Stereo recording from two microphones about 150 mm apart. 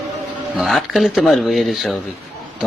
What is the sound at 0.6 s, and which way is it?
A man's voice, centre (ahead or behind).